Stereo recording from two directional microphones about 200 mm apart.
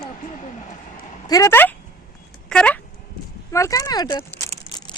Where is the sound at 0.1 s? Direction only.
40° left (ahead or behind).